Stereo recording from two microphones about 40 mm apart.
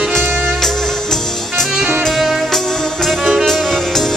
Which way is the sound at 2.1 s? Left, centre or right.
Centre.